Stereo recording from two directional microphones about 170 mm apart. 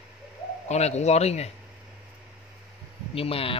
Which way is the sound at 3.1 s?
35° left (ahead or behind).